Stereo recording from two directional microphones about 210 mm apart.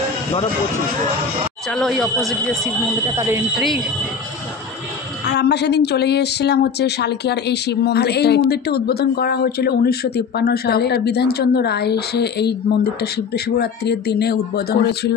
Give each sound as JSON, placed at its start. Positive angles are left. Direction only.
{"t": 1.7, "sound": "speech", "side_deg": 0}
{"t": 3.2, "sound": "speech", "side_deg": -10}
{"t": 5.2, "sound": "speech", "side_deg": 55}